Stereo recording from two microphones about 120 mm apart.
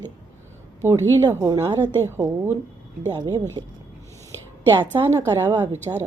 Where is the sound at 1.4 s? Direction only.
25° right (ahead or behind).